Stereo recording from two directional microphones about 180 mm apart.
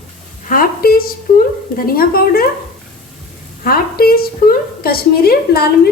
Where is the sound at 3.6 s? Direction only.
55° left (ahead or behind).